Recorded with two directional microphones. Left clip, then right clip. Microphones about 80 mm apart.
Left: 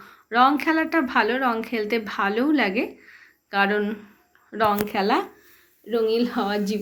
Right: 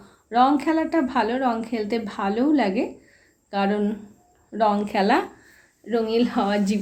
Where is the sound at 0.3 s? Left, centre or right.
Right.